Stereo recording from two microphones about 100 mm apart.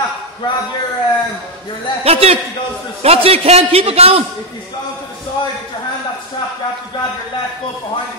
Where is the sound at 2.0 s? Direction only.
85° right.